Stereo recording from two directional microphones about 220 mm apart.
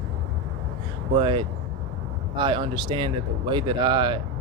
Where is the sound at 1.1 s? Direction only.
20° right (ahead or behind).